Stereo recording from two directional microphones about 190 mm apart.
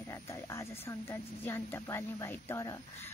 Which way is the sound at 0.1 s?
15° left (ahead or behind).